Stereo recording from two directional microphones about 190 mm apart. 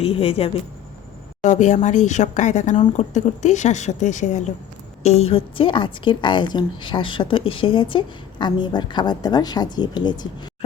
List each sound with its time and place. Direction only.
0.0 s a woman's voice: 30° left (ahead or behind)